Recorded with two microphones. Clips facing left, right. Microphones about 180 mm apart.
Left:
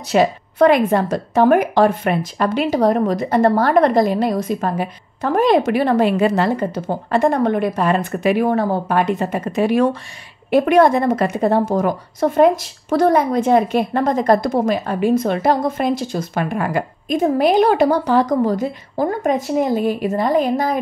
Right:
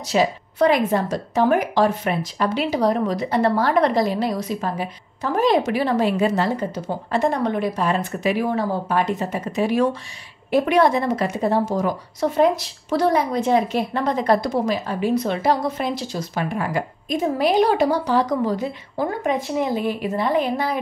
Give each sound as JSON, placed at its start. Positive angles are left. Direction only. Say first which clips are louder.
{"t": 0.1, "sound": "a woman's voice", "louder": "left 4 dB", "side_deg": 60}